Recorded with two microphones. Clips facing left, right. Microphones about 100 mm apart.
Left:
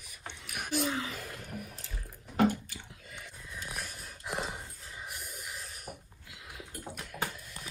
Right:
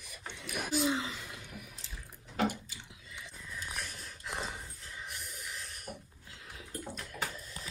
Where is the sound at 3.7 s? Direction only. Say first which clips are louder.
Left 1 dB; 10° left (ahead or behind).